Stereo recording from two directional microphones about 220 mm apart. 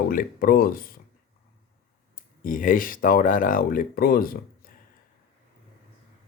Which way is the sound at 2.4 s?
40° left (ahead or behind).